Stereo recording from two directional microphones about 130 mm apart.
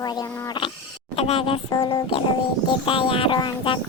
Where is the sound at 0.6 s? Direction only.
35° left (ahead or behind).